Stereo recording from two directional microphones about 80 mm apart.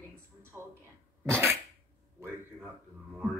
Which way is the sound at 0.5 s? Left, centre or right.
Right.